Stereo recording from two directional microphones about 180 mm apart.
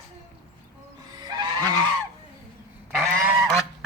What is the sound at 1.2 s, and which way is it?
Vehicle, 25° right (ahead or behind).